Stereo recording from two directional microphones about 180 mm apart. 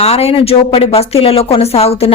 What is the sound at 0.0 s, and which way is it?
A woman's voice, 35° left (ahead or behind).